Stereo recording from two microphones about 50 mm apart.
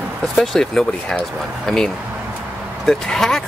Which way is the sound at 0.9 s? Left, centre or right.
Left.